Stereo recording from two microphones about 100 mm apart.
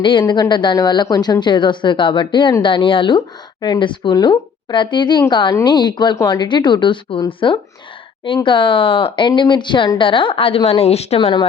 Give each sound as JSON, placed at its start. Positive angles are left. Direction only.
{"t": 0.0, "sound": "a woman's voice", "side_deg": 55}
{"t": 10.7, "sound": "speech", "side_deg": 90}